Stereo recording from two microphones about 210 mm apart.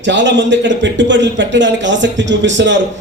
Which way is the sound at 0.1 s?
60° right (ahead or behind).